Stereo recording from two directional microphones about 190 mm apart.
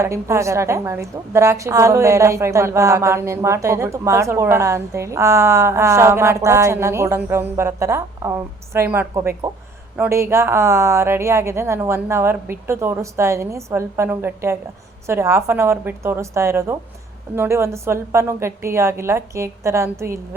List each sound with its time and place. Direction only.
0.0 s a woman's voice: 15° right (ahead or behind)